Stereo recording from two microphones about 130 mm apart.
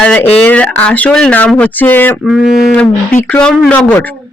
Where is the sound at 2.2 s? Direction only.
Centre (ahead or behind).